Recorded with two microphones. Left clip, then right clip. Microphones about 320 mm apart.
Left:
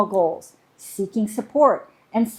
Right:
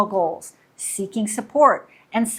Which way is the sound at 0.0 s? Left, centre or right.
Right.